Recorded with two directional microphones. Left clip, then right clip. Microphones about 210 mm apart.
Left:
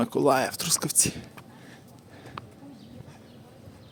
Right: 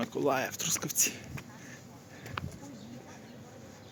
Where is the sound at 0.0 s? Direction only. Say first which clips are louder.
Left 7 dB; 35° left (ahead or behind).